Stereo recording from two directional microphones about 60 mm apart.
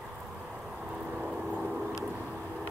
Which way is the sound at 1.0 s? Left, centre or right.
Centre.